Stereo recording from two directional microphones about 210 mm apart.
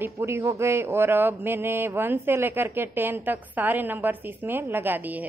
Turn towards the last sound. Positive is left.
turn(degrees=-10)  # may be behind; listen again after turning